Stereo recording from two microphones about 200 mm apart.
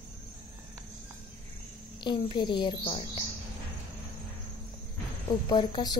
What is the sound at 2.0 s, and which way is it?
Speech, 25° left (ahead or behind).